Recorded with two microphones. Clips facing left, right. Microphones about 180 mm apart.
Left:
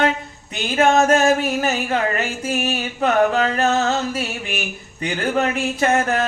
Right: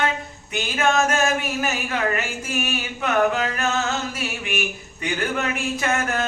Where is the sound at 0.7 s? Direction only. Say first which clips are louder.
Left 6 dB; 35° left (ahead or behind).